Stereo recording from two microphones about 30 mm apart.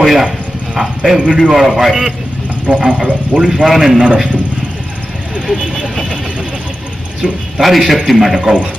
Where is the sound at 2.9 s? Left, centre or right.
Right.